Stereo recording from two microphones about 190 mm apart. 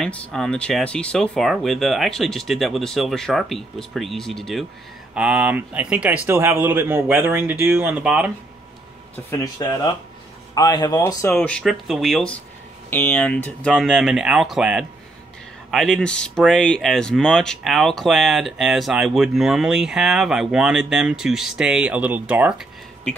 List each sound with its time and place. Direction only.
0.0 s speech: 5° left (ahead or behind)
9.1 s speech: 15° left (ahead or behind)
11.3 s speech: 5° left (ahead or behind)